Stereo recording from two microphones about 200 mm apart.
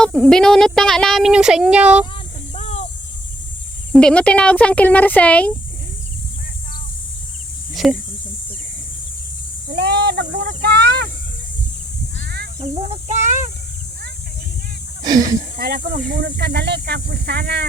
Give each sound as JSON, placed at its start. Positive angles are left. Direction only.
{"t": 0.0, "sound": "speech", "side_deg": 5}
{"t": 2.1, "sound": "cricket", "side_deg": 30}
{"t": 3.9, "sound": "speech", "side_deg": 5}
{"t": 7.7, "sound": "cricket", "side_deg": 0}
{"t": 9.7, "sound": "a sound", "side_deg": -55}
{"t": 12.2, "sound": "a sound", "side_deg": -50}
{"t": 12.9, "sound": "a sound", "side_deg": -35}
{"t": 15.0, "sound": "speech", "side_deg": -20}
{"t": 15.5, "sound": "speech", "side_deg": -50}